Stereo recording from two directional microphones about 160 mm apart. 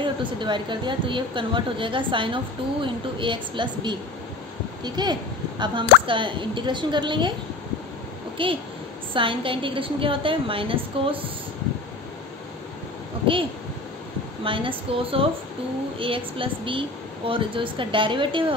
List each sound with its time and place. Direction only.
0.0 s a woman's voice: 30° right (ahead or behind)
8.4 s a woman's voice: 30° right (ahead or behind)
14.4 s a woman's voice: 35° right (ahead or behind)